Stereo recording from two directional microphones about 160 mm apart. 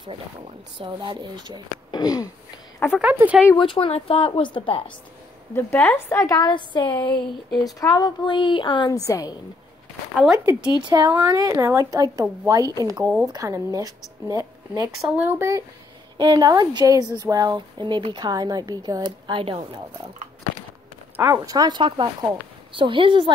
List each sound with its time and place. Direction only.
0.7 s a woman's voice: 30° right (ahead or behind)
1.9 s a sound: 25° left (ahead or behind)
3.0 s speech: 10° right (ahead or behind)
3.5 s speech: 35° left (ahead or behind)
5.5 s a woman's voice: 15° left (ahead or behind)
10.3 s a woman's voice: 20° right (ahead or behind)
13.0 s speech: 10° right (ahead or behind)
13.3 s a woman's voice: 20° right (ahead or behind)
16.2 s a woman's voice: 25° right (ahead or behind)
21.2 s speech: 10° right (ahead or behind)
21.5 s speech: 30° right (ahead or behind)